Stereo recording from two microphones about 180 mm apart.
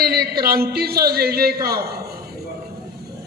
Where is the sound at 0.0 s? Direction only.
60° right (ahead or behind).